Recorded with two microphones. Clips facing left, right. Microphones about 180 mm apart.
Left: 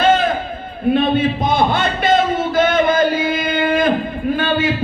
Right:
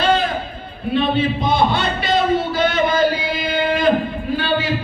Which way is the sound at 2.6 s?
50° left (ahead or behind).